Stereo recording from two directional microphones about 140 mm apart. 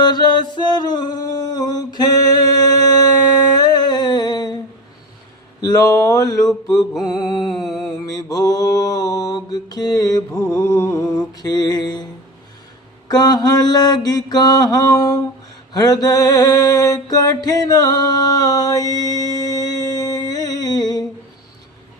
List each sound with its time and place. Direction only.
0.0 s music: 30° left (ahead or behind)
5.6 s mantra: 25° left (ahead or behind)
7.6 s mantra: centre (ahead or behind)
8.0 s mantra: 25° left (ahead or behind)
10.3 s mantra: 10° left (ahead or behind)
10.6 s mantra: 25° left (ahead or behind)
13.1 s mantra: 30° left (ahead or behind)